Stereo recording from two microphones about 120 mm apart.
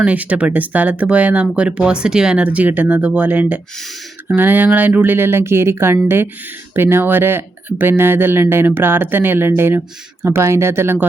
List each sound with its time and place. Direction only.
0.0 s speech: 10° right (ahead or behind)